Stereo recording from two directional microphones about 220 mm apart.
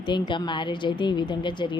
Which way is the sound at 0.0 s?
20° left (ahead or behind).